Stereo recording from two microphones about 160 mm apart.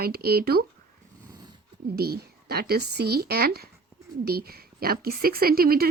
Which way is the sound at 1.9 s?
75° right (ahead or behind).